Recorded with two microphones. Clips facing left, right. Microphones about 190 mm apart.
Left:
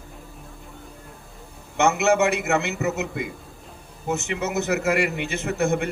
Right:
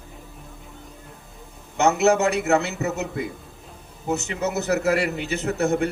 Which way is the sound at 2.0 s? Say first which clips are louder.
Right 1 dB; 35° right (ahead or behind).